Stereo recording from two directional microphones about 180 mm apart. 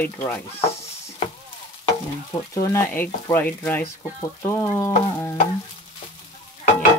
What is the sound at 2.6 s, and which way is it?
Speech, 15° left (ahead or behind).